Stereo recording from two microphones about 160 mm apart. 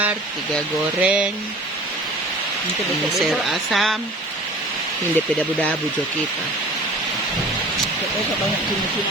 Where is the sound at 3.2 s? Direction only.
Centre (ahead or behind).